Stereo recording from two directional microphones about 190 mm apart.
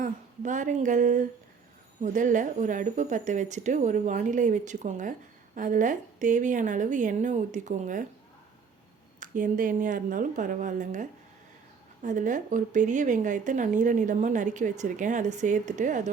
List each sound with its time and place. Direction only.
0.0 s a woman's voice: 40° right (ahead or behind)
9.2 s a woman's voice: 45° right (ahead or behind)